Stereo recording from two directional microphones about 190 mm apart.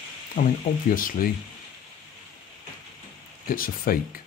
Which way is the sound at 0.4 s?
45° left (ahead or behind).